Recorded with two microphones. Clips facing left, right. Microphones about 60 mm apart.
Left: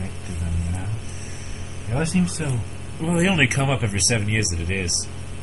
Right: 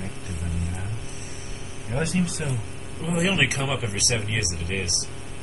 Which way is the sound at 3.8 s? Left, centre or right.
Left.